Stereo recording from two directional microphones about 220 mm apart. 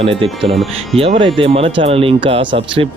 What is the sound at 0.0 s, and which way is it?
Speech, 25° right (ahead or behind).